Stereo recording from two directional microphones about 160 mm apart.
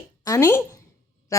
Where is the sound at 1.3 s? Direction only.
20° left (ahead or behind).